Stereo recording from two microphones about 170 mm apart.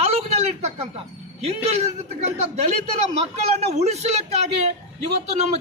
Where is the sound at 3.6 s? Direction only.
40° right (ahead or behind).